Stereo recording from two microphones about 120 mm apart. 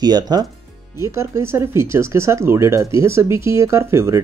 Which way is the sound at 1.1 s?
20° right (ahead or behind).